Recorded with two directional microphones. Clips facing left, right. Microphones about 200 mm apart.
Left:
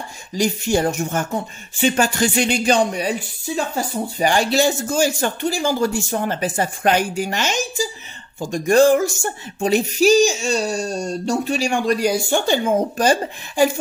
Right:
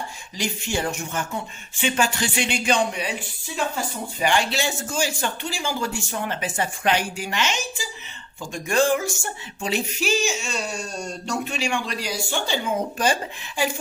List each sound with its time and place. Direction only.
0.3 s speech: 40° left (ahead or behind)